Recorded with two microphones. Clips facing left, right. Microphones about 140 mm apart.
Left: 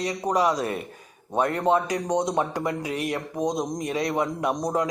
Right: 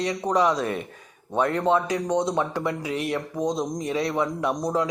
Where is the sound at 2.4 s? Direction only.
45° left (ahead or behind).